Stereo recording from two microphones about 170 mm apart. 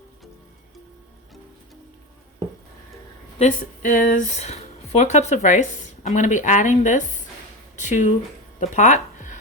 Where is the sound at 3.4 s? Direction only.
50° left (ahead or behind).